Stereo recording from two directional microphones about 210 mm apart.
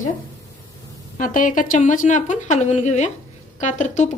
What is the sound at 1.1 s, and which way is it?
Speech, 40° left (ahead or behind).